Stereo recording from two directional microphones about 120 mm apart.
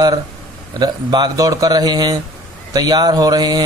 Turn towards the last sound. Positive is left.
turn(degrees=-35)  # may be behind; listen again after turning